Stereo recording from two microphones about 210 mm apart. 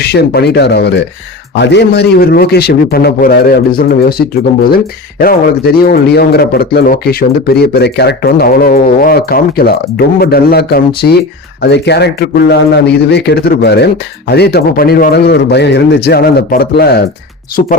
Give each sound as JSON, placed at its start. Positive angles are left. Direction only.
{"t": 0.0, "sound": "speech", "side_deg": 50}
{"t": 5.2, "sound": "speech", "side_deg": 45}